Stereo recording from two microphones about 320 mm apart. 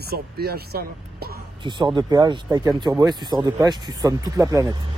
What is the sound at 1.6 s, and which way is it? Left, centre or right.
Speech, centre.